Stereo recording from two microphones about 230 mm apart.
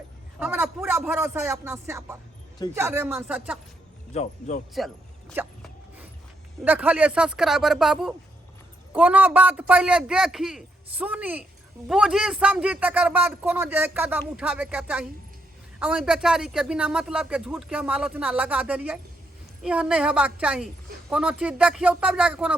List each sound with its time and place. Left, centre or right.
0.3 s a man's voice: centre
4.1 s speech: left
5.3 s a sound: centre
6.7 s a man's voice: centre